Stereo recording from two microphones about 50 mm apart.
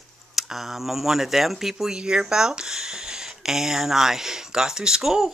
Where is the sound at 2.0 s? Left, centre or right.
Centre.